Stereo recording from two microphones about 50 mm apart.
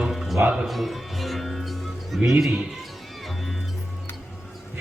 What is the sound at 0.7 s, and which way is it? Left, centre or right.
Speech, centre.